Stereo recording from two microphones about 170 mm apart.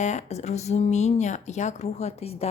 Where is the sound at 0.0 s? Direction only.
45° left (ahead or behind).